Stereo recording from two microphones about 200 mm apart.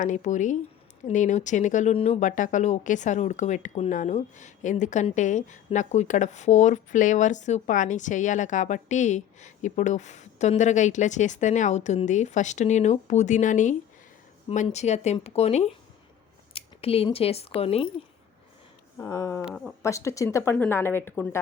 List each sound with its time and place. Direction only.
0.0 s speech: 40° left (ahead or behind)
18.9 s a woman's voice: 20° left (ahead or behind)
19.5 s speech: centre (ahead or behind)
19.8 s a woman's voice: 15° left (ahead or behind)